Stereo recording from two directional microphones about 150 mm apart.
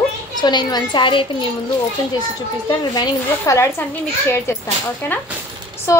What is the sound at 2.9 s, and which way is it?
Speech, 25° left (ahead or behind).